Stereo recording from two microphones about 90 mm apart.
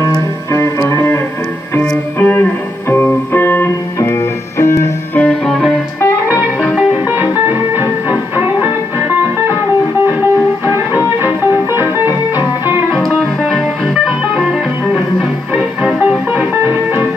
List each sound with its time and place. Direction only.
0.5 s music: 35° left (ahead or behind)
5.9 s music: 30° left (ahead or behind)
7.1 s music: 25° right (ahead or behind)
11.2 s music: 25° right (ahead or behind)
12.9 s music: centre (ahead or behind)
16.3 s music: 20° right (ahead or behind)